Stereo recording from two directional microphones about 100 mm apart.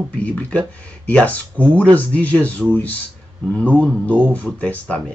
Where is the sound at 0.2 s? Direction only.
15° left (ahead or behind).